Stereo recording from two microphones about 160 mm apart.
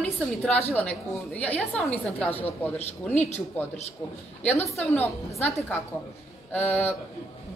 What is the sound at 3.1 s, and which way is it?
Speech, 40° left (ahead or behind).